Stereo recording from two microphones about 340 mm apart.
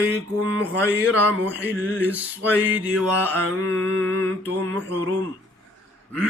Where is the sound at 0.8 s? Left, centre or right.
Right.